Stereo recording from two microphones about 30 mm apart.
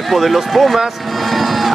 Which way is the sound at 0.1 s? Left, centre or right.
Centre.